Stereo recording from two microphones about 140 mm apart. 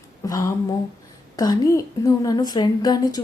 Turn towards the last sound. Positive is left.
turn(degrees=30)  # may be behind; listen again after turning